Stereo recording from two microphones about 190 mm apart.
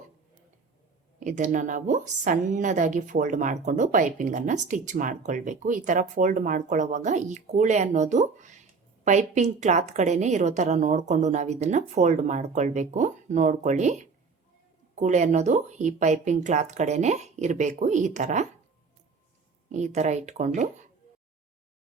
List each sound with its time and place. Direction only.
1.2 s a woman's voice: 40° right (ahead or behind)
19.7 s a woman's voice: 35° right (ahead or behind)